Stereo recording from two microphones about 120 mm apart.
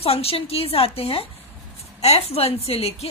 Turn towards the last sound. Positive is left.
turn(degrees=55)  # may be behind; listen again after turning